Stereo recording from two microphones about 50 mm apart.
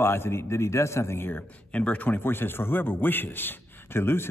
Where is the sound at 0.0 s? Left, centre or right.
Left.